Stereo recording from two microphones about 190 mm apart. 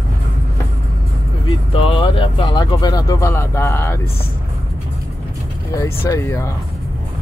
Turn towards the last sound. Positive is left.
turn(degrees=15)  # may be behind; listen again after turning